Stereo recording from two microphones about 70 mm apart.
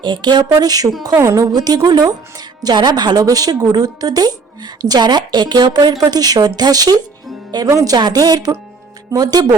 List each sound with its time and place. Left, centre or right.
0.0 s speech: right
1.1 s a woman's voice: right
1.5 s a woman's voice: right
7.7 s speech: right
7.9 s a woman's voice: right